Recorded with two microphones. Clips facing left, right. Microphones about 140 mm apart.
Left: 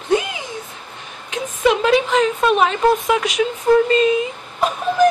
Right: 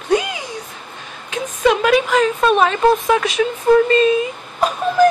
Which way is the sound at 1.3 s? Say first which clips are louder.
Right 1 dB; 20° left (ahead or behind).